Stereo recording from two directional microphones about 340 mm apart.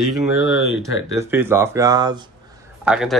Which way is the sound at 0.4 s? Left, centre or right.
Left.